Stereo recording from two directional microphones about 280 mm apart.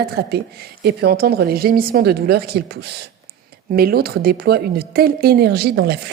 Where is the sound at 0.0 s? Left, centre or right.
Right.